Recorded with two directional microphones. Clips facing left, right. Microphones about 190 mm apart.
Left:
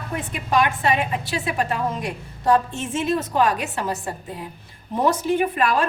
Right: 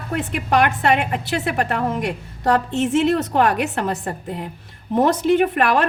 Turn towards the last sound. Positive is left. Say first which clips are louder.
# right 4 dB
turn(degrees=-65)  # may be behind; listen again after turning